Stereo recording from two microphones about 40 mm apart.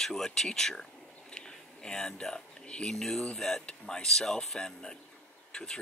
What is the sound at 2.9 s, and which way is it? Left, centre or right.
Speech, centre.